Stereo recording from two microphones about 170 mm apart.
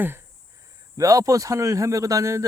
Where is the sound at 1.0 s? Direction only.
20° right (ahead or behind).